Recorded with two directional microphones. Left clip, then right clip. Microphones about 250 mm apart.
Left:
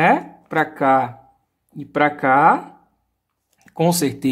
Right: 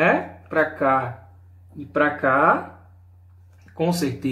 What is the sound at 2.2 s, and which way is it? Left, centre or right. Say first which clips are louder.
Speech: left 5 dB; left.